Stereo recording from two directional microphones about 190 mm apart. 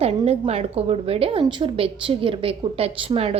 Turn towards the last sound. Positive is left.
turn(degrees=-30)  # may be behind; listen again after turning